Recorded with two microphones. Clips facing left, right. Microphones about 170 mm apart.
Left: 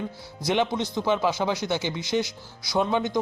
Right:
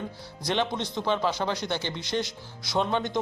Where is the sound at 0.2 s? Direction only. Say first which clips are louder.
Left 3 dB; 10° left (ahead or behind).